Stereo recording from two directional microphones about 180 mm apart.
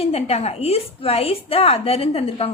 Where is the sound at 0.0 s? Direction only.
35° left (ahead or behind).